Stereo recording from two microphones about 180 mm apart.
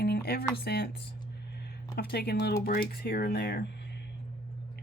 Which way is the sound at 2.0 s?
60° left (ahead or behind).